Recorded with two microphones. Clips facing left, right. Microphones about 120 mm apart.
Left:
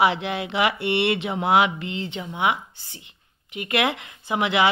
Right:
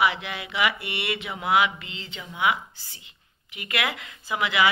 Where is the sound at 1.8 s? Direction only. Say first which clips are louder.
Left 11 dB; 55° left (ahead or behind).